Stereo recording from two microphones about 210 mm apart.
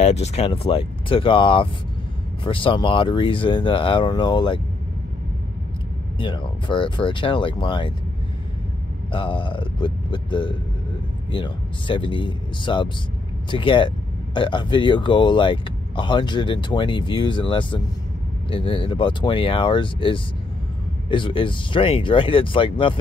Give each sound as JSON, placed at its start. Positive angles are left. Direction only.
{"t": 0.0, "sound": "speech", "side_deg": 30}
{"t": 6.1, "sound": "speech", "side_deg": 25}
{"t": 9.1, "sound": "speech", "side_deg": 25}